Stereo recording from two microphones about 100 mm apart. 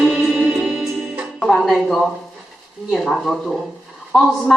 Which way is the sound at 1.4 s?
Centre (ahead or behind).